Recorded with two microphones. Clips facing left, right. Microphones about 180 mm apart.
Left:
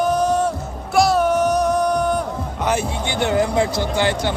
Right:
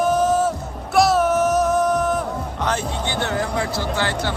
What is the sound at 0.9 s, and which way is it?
Music, centre (ahead or behind).